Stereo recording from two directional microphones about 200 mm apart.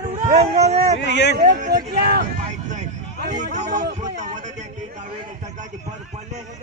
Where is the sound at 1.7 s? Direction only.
55° right (ahead or behind).